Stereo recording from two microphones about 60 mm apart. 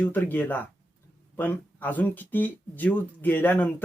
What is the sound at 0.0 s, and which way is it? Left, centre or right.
Speech, left.